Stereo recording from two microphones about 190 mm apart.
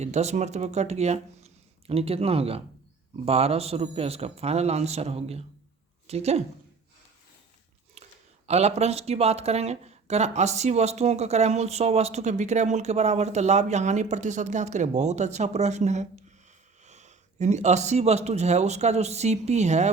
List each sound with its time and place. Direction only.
0.0 s speech: 35° right (ahead or behind)
8.4 s speech: 35° right (ahead or behind)